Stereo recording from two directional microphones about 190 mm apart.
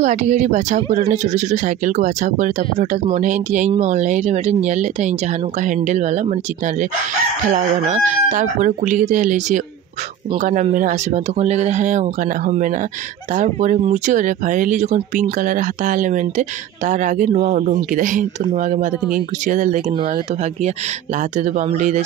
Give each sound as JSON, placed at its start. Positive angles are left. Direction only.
{"t": 0.0, "sound": "speech", "side_deg": -40}
{"t": 21.4, "sound": "speech", "side_deg": -40}